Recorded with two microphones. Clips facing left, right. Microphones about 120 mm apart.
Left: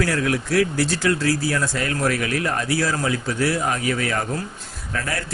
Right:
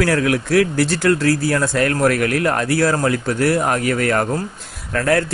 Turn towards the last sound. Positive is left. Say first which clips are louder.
# right 10 dB
turn(degrees=-60)  # may be behind; listen again after turning